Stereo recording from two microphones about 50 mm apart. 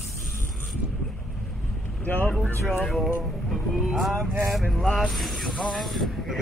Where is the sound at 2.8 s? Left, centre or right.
Centre.